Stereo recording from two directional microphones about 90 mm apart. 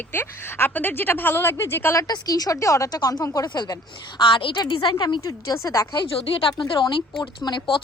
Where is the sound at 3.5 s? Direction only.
50° left (ahead or behind).